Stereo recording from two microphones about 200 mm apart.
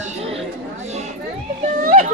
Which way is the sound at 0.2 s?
30° right (ahead or behind).